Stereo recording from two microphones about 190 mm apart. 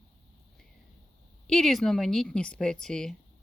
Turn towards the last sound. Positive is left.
turn(degrees=5)  # may be behind; listen again after turning